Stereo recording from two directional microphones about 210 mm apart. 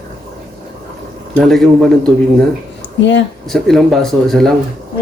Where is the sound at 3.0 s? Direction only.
60° left (ahead or behind).